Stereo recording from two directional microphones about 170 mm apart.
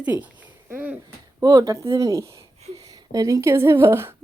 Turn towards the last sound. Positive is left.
turn(degrees=-15)  # may be behind; listen again after turning